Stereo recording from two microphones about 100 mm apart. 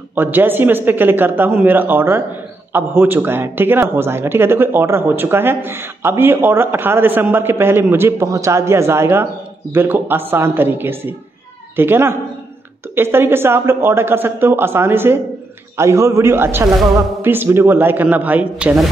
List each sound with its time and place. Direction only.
0.1 s a man's voice: 20° right (ahead or behind)